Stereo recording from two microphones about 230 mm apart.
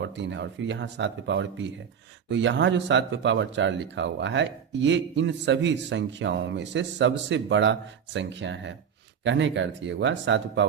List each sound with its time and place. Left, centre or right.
0.0 s speech: right